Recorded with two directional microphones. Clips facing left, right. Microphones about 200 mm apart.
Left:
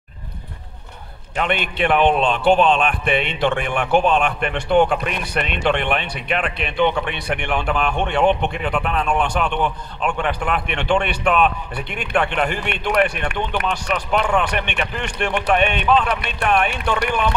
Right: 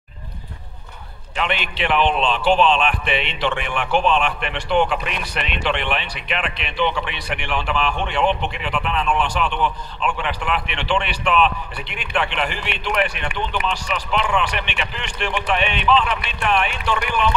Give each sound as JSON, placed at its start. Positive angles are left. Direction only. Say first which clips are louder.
{"t": 1.3, "sound": "speech", "louder": "left 3 dB", "side_deg": 50}